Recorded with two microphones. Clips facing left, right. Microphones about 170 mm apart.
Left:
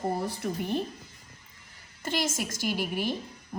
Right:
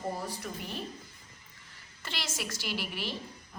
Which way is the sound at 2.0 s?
45° left (ahead or behind).